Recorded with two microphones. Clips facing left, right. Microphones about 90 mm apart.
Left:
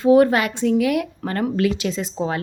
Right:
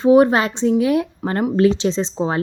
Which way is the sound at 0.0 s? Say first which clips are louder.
Right 2 dB; 20° right (ahead or behind).